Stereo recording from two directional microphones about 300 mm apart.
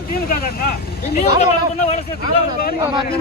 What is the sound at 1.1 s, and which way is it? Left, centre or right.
Speech, left.